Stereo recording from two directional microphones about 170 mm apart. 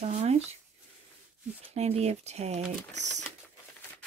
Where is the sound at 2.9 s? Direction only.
90° right.